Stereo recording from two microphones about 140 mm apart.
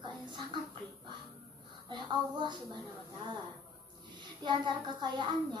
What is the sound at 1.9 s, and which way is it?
Child singing, 30° right (ahead or behind).